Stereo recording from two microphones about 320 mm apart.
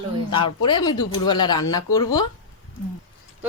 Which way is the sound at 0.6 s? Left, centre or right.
Centre.